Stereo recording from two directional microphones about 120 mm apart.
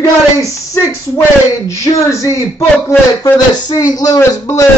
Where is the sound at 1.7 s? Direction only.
25° left (ahead or behind).